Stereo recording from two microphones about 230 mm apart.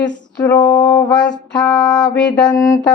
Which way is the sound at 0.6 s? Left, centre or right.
Centre.